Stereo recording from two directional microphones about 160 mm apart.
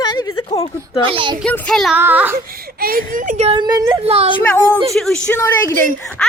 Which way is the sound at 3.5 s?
25° right (ahead or behind).